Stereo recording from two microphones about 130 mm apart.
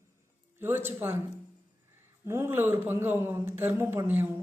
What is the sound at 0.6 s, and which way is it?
Speech, 15° right (ahead or behind).